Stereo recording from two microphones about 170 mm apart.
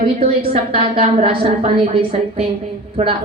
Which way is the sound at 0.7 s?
30° right (ahead or behind).